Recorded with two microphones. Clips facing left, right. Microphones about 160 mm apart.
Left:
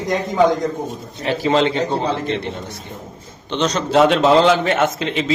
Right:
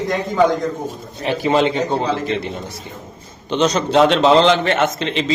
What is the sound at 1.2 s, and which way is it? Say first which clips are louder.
Speech: even; 20° right (ahead or behind).